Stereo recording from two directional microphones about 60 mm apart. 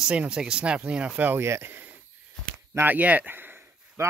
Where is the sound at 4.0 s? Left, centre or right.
Right.